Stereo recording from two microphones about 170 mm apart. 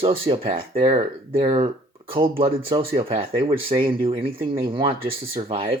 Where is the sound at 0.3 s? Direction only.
35° right (ahead or behind).